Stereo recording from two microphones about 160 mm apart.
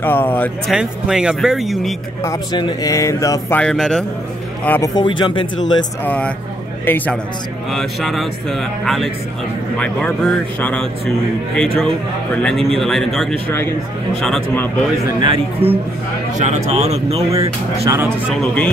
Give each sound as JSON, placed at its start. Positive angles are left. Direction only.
{"t": 0.0, "sound": "speech", "side_deg": 10}
{"t": 0.7, "sound": "a man's voice", "side_deg": -5}
{"t": 2.2, "sound": "speech", "side_deg": 25}
{"t": 3.5, "sound": "a man's voice", "side_deg": 5}
{"t": 4.6, "sound": "speech", "side_deg": 15}
{"t": 4.9, "sound": "speech", "side_deg": 30}
{"t": 6.0, "sound": "speech", "side_deg": 10}
{"t": 7.7, "sound": "a man's voice", "side_deg": 0}
{"t": 15.1, "sound": "a man's voice", "side_deg": -30}
{"t": 16.3, "sound": "speech", "side_deg": -45}
{"t": 17.3, "sound": "speech", "side_deg": -20}
{"t": 18.3, "sound": "a man's voice", "side_deg": 5}